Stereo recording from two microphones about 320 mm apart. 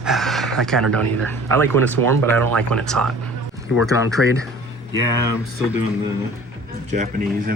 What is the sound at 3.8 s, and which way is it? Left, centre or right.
Speech, centre.